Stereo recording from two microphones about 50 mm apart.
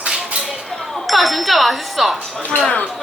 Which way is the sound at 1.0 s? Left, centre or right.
Centre.